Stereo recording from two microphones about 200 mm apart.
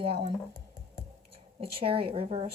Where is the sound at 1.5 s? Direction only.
30° right (ahead or behind).